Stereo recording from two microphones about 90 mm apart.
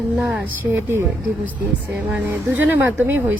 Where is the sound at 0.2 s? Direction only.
5° right (ahead or behind).